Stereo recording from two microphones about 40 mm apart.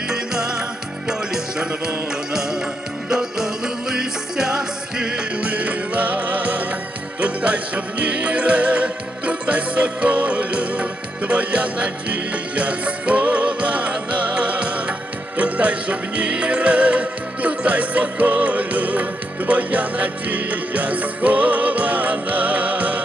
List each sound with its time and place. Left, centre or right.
0.1 s music: centre
5.4 s music: right